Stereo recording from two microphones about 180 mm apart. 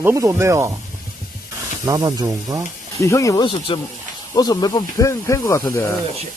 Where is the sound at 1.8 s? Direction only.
20° right (ahead or behind).